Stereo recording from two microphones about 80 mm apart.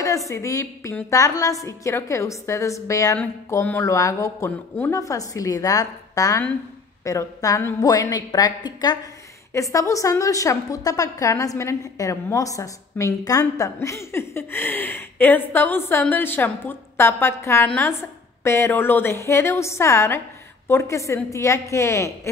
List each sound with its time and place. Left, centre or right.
0.3 s a woman's voice: left
9.5 s a woman's voice: left
13.7 s a woman's voice: left